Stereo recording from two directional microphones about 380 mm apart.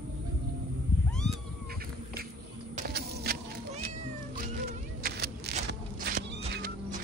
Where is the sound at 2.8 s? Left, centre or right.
Right.